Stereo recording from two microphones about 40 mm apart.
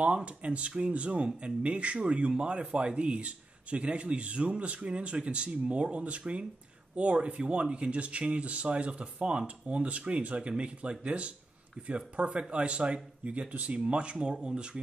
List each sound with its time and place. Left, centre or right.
0.0 s speech: right